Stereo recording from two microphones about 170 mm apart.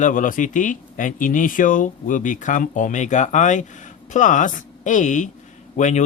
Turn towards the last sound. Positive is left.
turn(degrees=45)  # may be behind; listen again after turning